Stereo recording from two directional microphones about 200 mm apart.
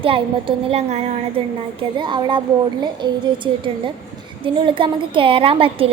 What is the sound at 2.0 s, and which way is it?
A woman's voice, 25° right (ahead or behind).